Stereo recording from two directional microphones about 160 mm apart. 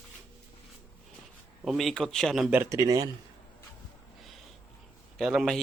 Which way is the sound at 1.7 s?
Centre (ahead or behind).